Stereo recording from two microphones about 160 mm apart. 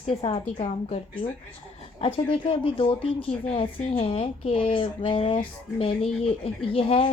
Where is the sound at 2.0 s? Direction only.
35° left (ahead or behind).